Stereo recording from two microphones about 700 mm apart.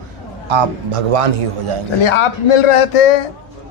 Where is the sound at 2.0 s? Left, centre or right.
Left.